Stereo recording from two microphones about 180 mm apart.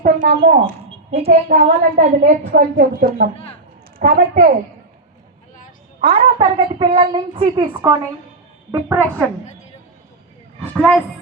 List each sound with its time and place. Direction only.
0.0 s a woman's voice: 45° right (ahead or behind)
0.9 s a sound: 35° right (ahead or behind)
1.5 s a woman's voice: 50° right (ahead or behind)
6.4 s speech: 25° right (ahead or behind)
8.7 s a woman's voice: 15° right (ahead or behind)
10.8 s speech: 5° left (ahead or behind)